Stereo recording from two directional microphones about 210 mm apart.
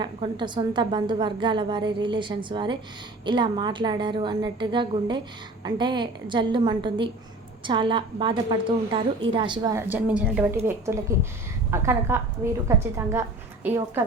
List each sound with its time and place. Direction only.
0.0 s a woman's voice: 20° right (ahead or behind)
11.7 s a woman's voice: 10° right (ahead or behind)